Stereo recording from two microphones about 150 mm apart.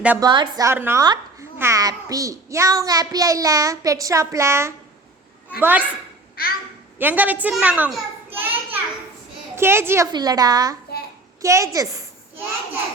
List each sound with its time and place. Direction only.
0.2 s a child's voice: 30° right (ahead or behind)
1.0 s a sound: 30° right (ahead or behind)
1.5 s a child's voice: 20° right (ahead or behind)
6.4 s a child's voice: 80° left
7.0 s a woman's voice: 10° right (ahead or behind)
8.3 s a sound: 15° right (ahead or behind)
9.6 s a woman's voice: 15° right (ahead or behind)
10.1 s a child's voice: 25° right (ahead or behind)